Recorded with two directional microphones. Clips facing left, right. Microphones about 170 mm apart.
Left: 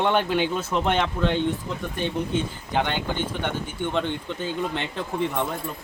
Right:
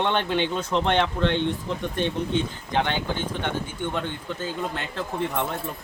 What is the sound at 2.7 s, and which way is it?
Speech, 10° left (ahead or behind).